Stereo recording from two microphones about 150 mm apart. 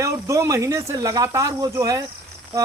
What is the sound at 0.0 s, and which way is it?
A man's voice, 20° right (ahead or behind).